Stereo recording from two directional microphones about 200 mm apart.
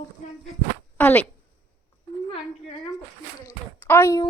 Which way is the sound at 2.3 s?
25° left (ahead or behind).